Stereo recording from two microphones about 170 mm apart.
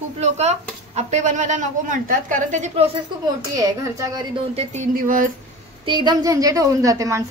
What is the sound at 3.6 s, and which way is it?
Speech, 20° right (ahead or behind).